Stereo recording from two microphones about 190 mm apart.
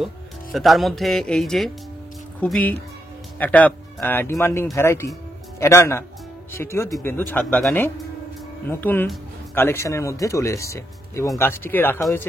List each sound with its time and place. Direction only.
0.0 s speech: centre (ahead or behind)